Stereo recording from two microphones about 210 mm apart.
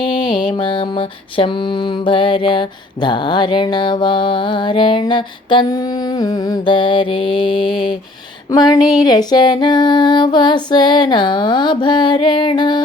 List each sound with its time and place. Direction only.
0.0 s mantra: 20° left (ahead or behind)